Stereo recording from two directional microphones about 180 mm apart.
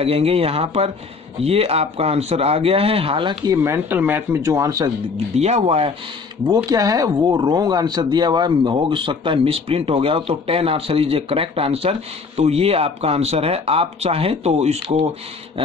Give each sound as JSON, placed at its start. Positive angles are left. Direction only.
{"t": 0.0, "sound": "speech", "side_deg": -35}
{"t": 3.5, "sound": "speech", "side_deg": -15}
{"t": 5.1, "sound": "speech", "side_deg": -35}
{"t": 6.4, "sound": "speech", "side_deg": -20}